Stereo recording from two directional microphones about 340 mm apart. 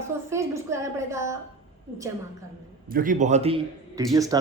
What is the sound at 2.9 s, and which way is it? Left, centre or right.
A man's voice, right.